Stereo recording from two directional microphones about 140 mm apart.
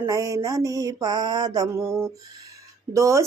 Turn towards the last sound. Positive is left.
turn(degrees=-20)  # may be behind; listen again after turning